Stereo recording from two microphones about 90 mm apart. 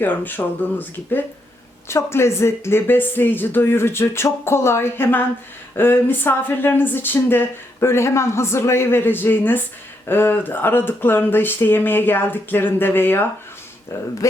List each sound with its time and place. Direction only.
0.0 s speech: 20° left (ahead or behind)